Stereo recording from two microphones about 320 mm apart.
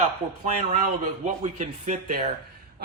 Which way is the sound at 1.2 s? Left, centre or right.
Right.